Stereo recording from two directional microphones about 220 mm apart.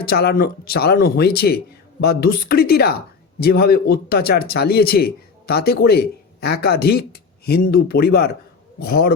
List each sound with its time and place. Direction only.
0.0 s a man's voice: 45° left (ahead or behind)